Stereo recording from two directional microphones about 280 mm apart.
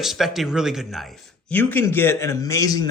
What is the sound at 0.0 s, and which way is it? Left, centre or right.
Speech, centre.